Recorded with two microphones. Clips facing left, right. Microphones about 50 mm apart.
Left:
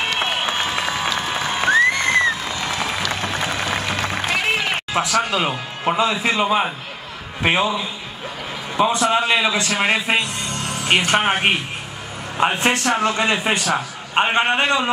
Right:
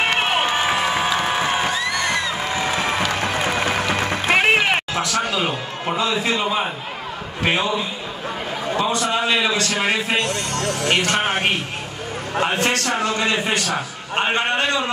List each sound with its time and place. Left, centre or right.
0.0 s crowd: right
1.7 s music: left
2.5 s music: right
4.9 s speech: left
8.7 s a man's voice: centre